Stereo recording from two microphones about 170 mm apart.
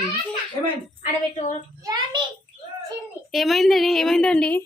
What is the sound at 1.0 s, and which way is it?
Speech, 45° left (ahead or behind).